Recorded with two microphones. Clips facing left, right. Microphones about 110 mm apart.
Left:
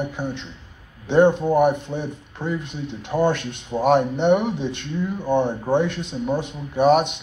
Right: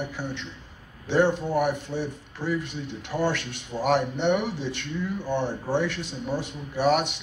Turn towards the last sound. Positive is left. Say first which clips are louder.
# left 6 dB
turn(degrees=20)  # may be behind; listen again after turning